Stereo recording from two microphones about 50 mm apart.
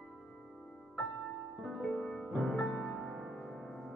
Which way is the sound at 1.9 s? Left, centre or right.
Centre.